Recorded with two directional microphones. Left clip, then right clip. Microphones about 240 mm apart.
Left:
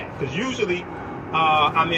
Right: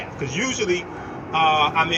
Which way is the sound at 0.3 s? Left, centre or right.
Right.